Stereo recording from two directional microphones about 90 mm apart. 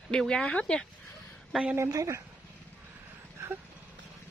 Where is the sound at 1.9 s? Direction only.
40° right (ahead or behind).